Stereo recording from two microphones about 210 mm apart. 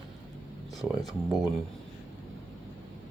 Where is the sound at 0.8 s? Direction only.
Centre (ahead or behind).